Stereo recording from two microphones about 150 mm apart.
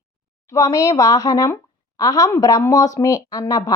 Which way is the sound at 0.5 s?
20° left (ahead or behind).